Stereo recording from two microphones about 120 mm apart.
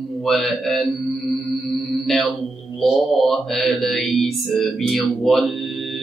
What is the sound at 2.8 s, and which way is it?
Mantra, centre (ahead or behind).